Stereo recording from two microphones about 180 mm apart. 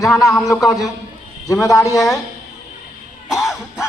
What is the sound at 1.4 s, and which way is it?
Speech, 20° left (ahead or behind).